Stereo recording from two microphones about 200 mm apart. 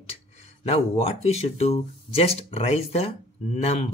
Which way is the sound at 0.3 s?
35° left (ahead or behind).